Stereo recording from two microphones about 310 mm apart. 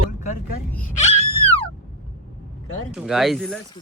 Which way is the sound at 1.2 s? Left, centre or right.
Right.